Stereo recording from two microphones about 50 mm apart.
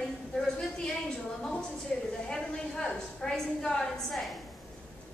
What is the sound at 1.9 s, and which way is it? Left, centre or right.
Speech, centre.